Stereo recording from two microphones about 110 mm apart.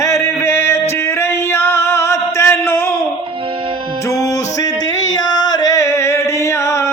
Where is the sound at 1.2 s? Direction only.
25° left (ahead or behind).